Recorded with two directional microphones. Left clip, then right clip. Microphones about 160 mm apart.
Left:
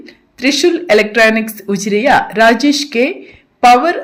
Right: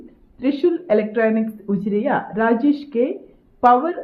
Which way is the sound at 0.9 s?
25° left (ahead or behind).